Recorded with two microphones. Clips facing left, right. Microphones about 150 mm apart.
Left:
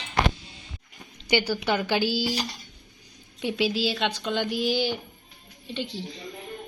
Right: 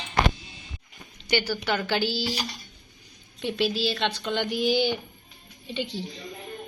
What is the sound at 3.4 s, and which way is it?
Speech, 10° left (ahead or behind).